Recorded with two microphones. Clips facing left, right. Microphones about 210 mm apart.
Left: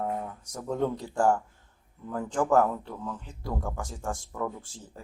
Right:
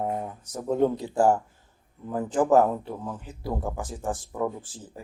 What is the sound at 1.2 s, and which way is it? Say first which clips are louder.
Speech: right 3 dB; 5° right (ahead or behind).